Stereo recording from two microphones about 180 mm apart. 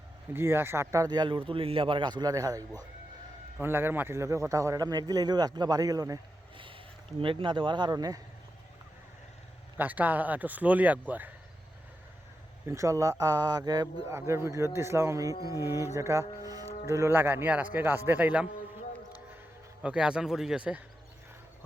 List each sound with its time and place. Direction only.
0.3 s a man's voice: 15° right (ahead or behind)
9.7 s speech: 10° right (ahead or behind)
12.6 s speech: 15° right (ahead or behind)
19.8 s speech: 5° right (ahead or behind)